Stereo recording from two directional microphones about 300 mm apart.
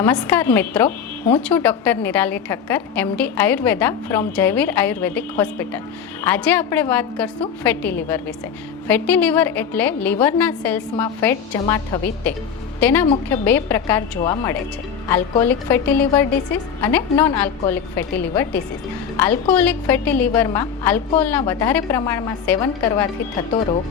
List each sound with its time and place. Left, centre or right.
0.0 s a woman's voice: centre
19.1 s a woman's voice: centre